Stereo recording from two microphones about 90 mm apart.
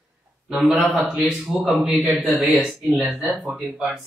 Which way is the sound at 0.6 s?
5° right (ahead or behind).